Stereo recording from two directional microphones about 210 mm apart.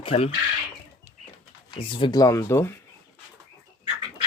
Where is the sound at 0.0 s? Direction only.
25° left (ahead or behind).